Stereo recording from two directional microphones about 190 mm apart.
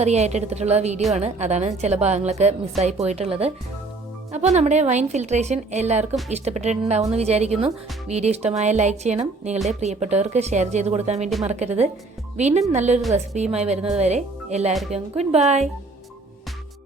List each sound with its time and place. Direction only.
0.0 s speech: 35° right (ahead or behind)
14.7 s speech: centre (ahead or behind)
14.9 s speech: 35° right (ahead or behind)